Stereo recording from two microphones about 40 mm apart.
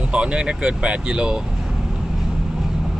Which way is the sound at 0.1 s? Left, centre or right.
Right.